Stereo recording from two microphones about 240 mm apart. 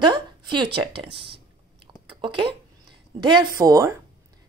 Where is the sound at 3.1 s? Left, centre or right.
Centre.